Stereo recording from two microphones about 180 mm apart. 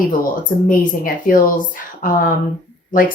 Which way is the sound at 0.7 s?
50° left (ahead or behind).